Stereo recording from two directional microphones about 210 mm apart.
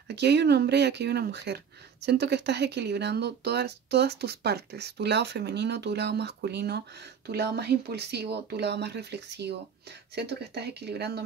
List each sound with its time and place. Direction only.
0.1 s speech: 55° right (ahead or behind)